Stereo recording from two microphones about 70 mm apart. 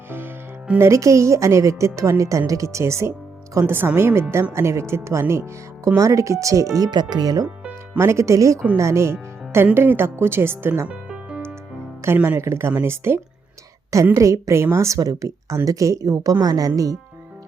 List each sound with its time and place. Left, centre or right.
0.8 s speech: right
3.7 s speech: right
6.9 s speech: right
7.4 s music: centre
7.9 s speech: right
10.8 s music: centre
12.0 s speech: right
13.9 s speech: right
16.3 s a woman's voice: right